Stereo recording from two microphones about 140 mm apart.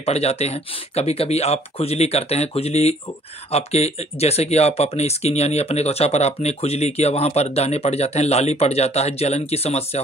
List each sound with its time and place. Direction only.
0.0 s speech: 50° left (ahead or behind)